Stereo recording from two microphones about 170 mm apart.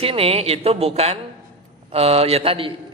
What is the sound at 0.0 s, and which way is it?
A man's voice, 35° right (ahead or behind).